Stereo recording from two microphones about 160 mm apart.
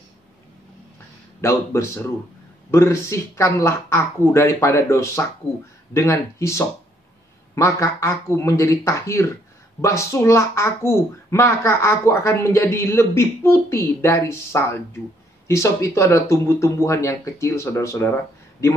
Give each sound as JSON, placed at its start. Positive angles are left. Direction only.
{"t": 1.4, "sound": "speech", "side_deg": 15}